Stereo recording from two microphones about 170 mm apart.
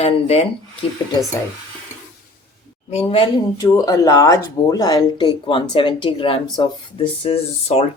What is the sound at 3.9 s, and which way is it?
Speech, 20° left (ahead or behind).